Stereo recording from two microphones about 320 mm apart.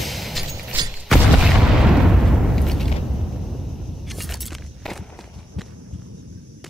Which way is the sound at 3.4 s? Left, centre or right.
Centre.